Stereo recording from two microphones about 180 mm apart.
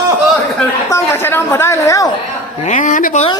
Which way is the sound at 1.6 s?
15° left (ahead or behind).